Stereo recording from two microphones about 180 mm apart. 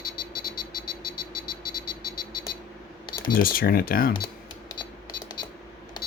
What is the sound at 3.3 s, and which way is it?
Speech, 55° left (ahead or behind).